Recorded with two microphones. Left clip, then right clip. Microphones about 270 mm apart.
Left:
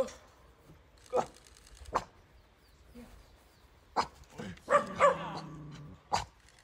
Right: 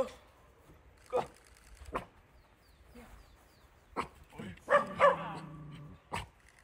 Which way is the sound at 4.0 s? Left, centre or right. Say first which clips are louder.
Left 6 dB; left.